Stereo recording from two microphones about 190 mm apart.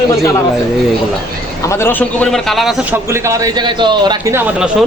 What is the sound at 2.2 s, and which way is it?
Speech, centre (ahead or behind).